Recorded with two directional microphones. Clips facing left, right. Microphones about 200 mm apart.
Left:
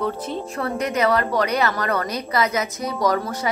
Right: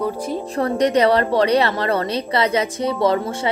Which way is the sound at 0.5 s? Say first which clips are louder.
Right 8 dB; 35° right (ahead or behind).